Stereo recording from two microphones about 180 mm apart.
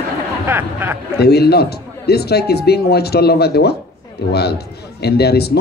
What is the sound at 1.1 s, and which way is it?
Speech, 60° left (ahead or behind).